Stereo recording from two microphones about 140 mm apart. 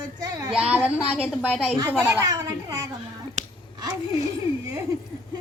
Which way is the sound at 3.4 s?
65° right (ahead or behind).